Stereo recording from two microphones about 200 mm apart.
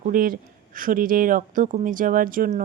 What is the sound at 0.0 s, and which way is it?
Speech, 45° right (ahead or behind).